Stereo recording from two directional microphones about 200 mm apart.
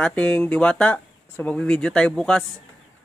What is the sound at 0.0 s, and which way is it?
Speech, 5° left (ahead or behind).